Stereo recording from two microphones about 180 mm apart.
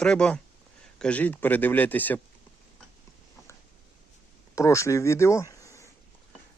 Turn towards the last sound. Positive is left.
turn(degrees=15)  # may be behind; listen again after turning